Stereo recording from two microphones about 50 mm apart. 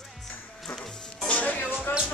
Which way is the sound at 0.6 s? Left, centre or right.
Centre.